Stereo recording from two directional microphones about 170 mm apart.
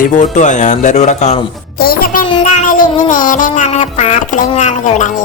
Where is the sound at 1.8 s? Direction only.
60° left (ahead or behind).